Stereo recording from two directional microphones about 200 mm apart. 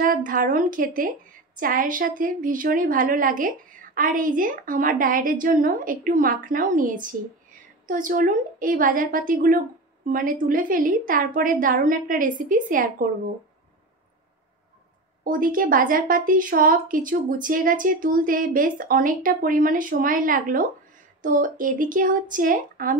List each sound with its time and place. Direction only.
0.0 s a woman's voice: 45° right (ahead or behind)
15.2 s a woman's voice: 45° right (ahead or behind)